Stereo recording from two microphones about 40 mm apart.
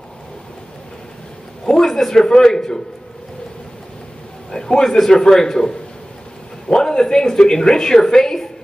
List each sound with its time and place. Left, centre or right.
1.7 s a sound: centre
2.2 s a woman's voice: centre
4.5 s a woman's voice: centre